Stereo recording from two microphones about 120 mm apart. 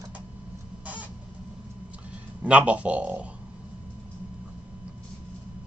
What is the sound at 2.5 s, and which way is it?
Speech, 10° right (ahead or behind).